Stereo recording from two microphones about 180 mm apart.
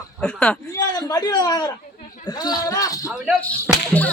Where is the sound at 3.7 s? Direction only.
5° right (ahead or behind).